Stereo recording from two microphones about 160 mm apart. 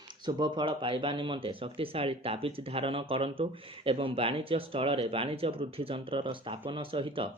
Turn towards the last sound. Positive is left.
turn(degrees=-35)  # may be behind; listen again after turning